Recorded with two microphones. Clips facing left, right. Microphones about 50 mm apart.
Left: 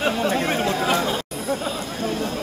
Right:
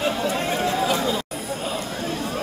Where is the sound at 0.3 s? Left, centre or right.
Left.